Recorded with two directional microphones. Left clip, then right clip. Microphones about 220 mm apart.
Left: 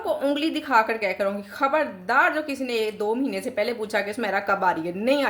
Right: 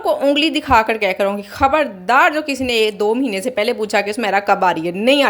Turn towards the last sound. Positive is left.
turn(degrees=-35)  # may be behind; listen again after turning